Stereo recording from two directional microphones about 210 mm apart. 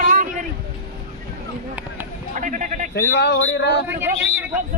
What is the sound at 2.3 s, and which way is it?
Sheep, 35° right (ahead or behind).